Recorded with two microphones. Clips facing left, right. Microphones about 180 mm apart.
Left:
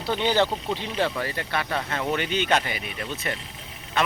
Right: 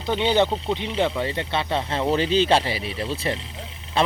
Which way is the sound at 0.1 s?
20° right (ahead or behind).